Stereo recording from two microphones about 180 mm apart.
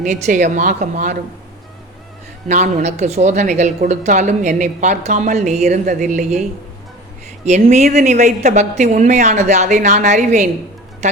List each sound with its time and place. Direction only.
0.0 s a woman's voice: 45° right (ahead or behind)
2.5 s a woman's voice: 40° right (ahead or behind)
7.9 s speech: 40° right (ahead or behind)